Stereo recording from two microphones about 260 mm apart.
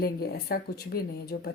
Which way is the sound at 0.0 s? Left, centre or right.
Left.